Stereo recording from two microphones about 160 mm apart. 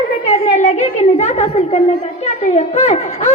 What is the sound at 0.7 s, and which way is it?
A woman's voice, 45° left (ahead or behind).